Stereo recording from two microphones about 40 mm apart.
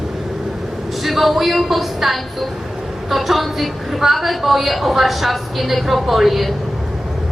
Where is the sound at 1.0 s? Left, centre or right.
Centre.